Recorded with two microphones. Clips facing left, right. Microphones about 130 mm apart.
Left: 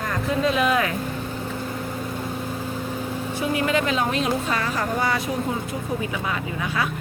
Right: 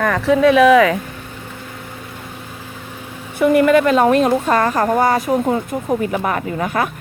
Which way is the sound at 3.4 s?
60° right (ahead or behind).